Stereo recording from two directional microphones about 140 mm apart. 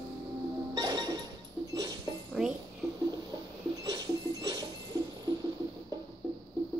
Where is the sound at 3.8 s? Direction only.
25° right (ahead or behind).